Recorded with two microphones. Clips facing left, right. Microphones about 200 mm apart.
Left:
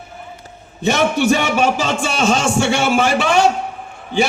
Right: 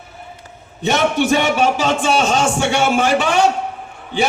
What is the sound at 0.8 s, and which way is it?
A man's voice, 45° left (ahead or behind).